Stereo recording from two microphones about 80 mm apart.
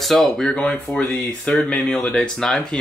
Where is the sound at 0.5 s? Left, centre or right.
Centre.